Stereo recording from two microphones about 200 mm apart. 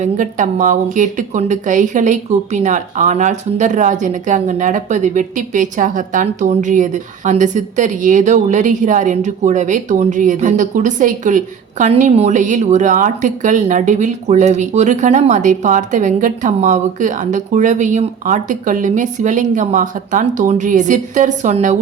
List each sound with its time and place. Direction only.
0.0 s a woman's voice: 40° right (ahead or behind)